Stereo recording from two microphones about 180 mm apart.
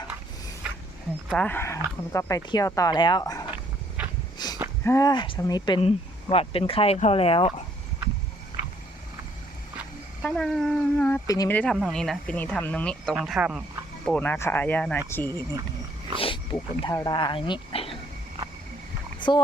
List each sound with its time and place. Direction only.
0.6 s a sound: 5° right (ahead or behind)
1.3 s speech: 10° left (ahead or behind)
4.0 s a sound: 5° right (ahead or behind)
4.4 s a sound: 25° left (ahead or behind)
4.8 s speech: 15° left (ahead or behind); by 7.5 s 30° left (ahead or behind)
10.2 s speech: 5° left (ahead or behind)
11.5 s speech: 5° left (ahead or behind)
13.1 s speech: 5° right (ahead or behind)
14.0 s speech: 5° left (ahead or behind)
16.1 s speech: 30° left (ahead or behind)
19.2 s speech: 25° left (ahead or behind)